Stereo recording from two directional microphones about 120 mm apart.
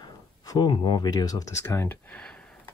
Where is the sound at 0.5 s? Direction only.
35° left (ahead or behind).